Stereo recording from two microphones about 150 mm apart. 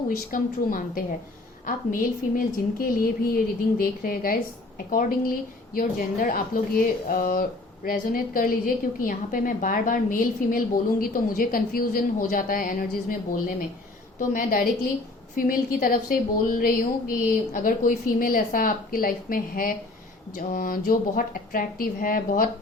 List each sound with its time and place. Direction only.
0.3 s a woman's voice: 65° left (ahead or behind)
14.2 s a woman's voice: 70° left (ahead or behind)